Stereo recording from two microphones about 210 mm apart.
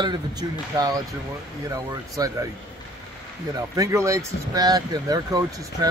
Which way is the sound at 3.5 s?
15° right (ahead or behind).